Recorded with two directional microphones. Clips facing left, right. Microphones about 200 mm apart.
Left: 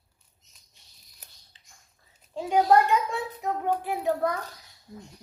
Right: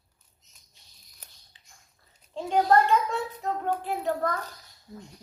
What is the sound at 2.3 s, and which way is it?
A child's voice, 10° left (ahead or behind).